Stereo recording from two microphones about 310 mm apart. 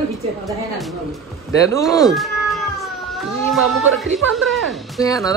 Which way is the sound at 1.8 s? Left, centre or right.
Centre.